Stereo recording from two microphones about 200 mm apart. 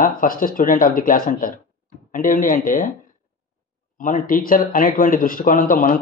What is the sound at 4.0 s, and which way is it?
Speech, 40° left (ahead or behind).